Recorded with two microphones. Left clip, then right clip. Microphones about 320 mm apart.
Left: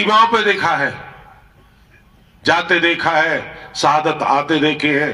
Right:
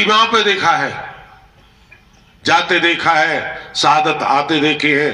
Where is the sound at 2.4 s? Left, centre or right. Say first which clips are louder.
Right 1 dB; left.